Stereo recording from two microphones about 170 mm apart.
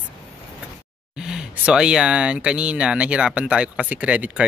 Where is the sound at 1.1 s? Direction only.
5° right (ahead or behind).